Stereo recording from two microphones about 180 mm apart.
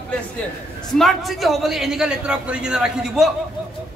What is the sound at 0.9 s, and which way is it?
A man's voice, centre (ahead or behind).